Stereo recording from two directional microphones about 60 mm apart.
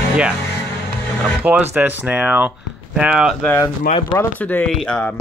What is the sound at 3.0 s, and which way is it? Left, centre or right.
Speech, centre.